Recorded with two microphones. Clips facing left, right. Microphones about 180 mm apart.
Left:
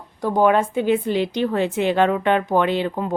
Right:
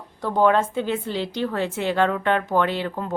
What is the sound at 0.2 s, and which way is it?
A woman's voice, 10° left (ahead or behind).